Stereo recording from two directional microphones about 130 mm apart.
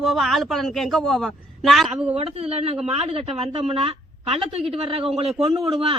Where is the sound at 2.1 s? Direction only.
50° right (ahead or behind).